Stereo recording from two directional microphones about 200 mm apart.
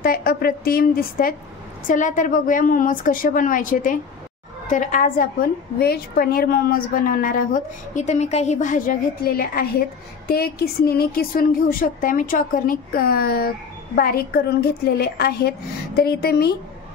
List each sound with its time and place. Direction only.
0.0 s a woman's voice: 45° left (ahead or behind)